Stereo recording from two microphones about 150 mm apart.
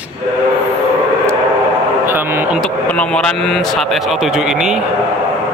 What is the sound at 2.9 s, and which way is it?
Speech, 5° left (ahead or behind).